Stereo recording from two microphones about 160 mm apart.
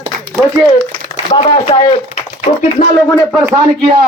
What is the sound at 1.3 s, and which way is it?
Speech, 35° left (ahead or behind).